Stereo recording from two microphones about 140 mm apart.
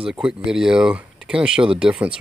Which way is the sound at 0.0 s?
5° right (ahead or behind).